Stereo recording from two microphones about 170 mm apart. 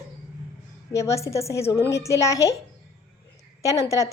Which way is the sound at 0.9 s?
15° left (ahead or behind).